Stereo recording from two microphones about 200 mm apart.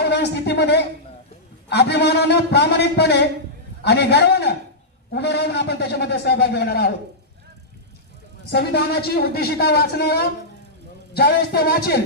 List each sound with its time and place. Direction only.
0.0 s a man's voice: 55° left (ahead or behind)
8.5 s speech: 55° left (ahead or behind)